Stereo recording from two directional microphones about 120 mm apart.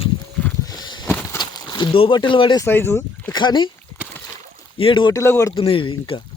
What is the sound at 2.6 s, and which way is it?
Speech, 20° left (ahead or behind).